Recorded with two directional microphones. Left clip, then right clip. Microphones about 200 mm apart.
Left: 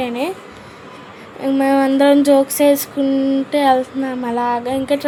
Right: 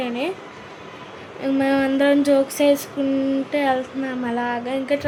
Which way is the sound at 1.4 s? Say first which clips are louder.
Left 5 dB; 10° left (ahead or behind).